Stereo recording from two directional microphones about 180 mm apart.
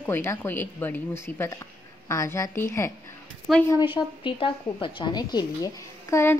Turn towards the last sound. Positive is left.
turn(degrees=15)  # may be behind; listen again after turning